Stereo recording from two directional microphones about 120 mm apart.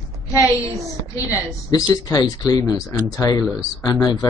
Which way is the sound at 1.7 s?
30° left (ahead or behind).